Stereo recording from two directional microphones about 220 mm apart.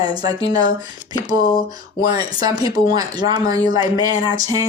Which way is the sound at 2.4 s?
15° right (ahead or behind).